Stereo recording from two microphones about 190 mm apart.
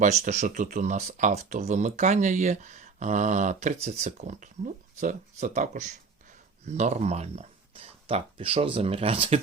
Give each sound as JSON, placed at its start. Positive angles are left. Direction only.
{"t": 0.0, "sound": "speech", "side_deg": -40}